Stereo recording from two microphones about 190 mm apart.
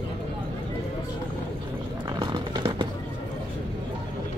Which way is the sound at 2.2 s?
20° right (ahead or behind).